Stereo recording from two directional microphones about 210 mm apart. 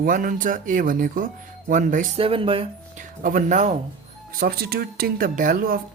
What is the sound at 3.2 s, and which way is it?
Speech, 40° right (ahead or behind).